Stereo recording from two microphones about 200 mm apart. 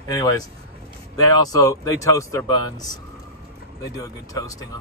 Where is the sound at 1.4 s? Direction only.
15° left (ahead or behind).